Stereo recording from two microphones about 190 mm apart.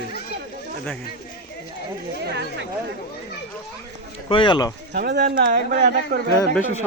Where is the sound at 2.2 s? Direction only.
60° right (ahead or behind).